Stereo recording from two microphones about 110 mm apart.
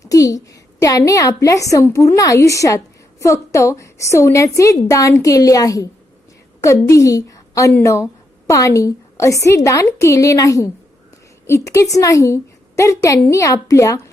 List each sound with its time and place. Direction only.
0.0 s a woman's voice: 30° left (ahead or behind)